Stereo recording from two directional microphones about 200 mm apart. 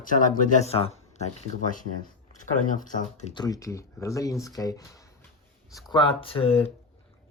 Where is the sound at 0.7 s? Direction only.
30° left (ahead or behind).